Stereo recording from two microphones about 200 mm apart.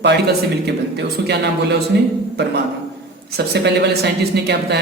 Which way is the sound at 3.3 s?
55° right (ahead or behind).